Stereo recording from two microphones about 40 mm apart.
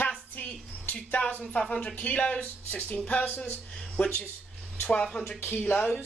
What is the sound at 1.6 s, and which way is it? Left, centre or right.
Speech, left.